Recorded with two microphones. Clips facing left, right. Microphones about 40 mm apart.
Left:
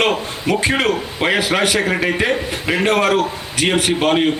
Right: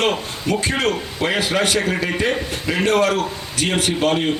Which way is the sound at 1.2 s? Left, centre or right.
Left.